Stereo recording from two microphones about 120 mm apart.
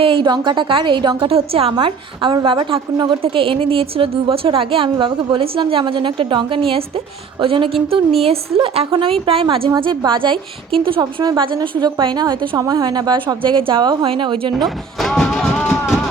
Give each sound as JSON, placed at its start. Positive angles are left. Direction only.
{"t": 0.0, "sound": "a woman's voice", "side_deg": -45}
{"t": 1.7, "sound": "a woman's voice", "side_deg": -40}
{"t": 15.0, "sound": "music", "side_deg": 5}